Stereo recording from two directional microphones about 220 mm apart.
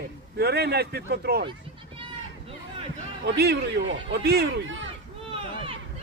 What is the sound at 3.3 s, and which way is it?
A man's voice, 45° right (ahead or behind).